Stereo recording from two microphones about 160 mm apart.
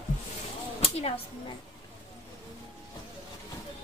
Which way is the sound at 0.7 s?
35° left (ahead or behind).